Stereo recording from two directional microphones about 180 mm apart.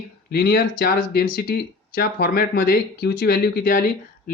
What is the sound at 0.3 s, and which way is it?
Speech, 60° left (ahead or behind).